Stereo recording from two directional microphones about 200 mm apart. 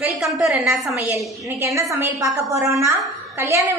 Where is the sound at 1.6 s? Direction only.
15° right (ahead or behind).